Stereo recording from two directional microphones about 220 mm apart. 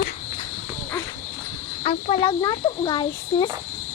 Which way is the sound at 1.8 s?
30° left (ahead or behind).